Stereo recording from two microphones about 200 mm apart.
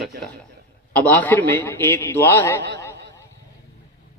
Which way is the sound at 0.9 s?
10° left (ahead or behind).